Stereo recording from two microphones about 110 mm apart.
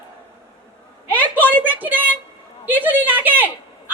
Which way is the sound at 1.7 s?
15° right (ahead or behind).